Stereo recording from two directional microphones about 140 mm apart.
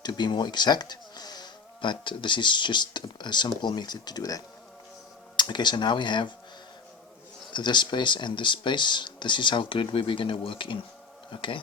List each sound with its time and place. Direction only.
0.0 s speech: 30° left (ahead or behind)
7.5 s speech: 35° left (ahead or behind)